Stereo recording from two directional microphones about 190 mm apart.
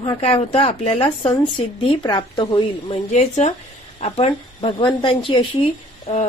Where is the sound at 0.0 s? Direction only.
25° left (ahead or behind).